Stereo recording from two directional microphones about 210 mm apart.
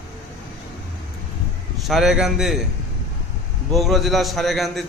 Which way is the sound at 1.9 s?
Centre (ahead or behind).